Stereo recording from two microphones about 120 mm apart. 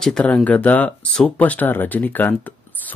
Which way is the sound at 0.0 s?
5° left (ahead or behind).